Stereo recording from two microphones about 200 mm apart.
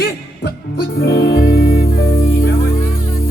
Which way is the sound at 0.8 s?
50° left (ahead or behind).